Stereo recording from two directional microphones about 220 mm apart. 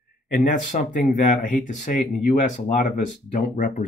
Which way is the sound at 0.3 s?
35° left (ahead or behind).